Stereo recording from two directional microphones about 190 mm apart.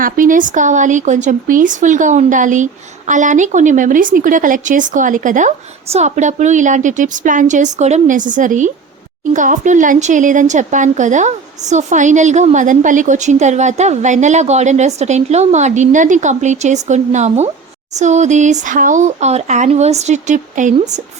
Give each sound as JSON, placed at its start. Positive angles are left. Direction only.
{"t": 0.0, "sound": "speech", "side_deg": -45}